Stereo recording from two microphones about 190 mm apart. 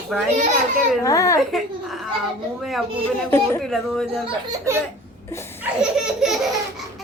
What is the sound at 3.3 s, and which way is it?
Speech, 10° left (ahead or behind).